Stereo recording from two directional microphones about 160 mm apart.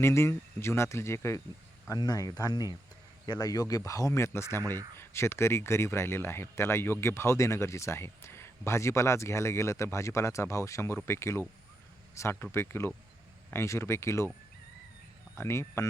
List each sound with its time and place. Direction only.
0.0 s speech: 15° left (ahead or behind)
15.4 s speech: 15° left (ahead or behind)